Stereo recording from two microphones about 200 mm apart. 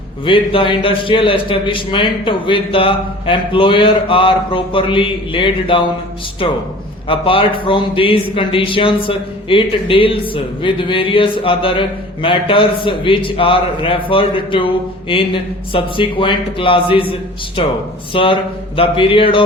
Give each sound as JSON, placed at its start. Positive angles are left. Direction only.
{"t": 0.3, "sound": "speech", "side_deg": 25}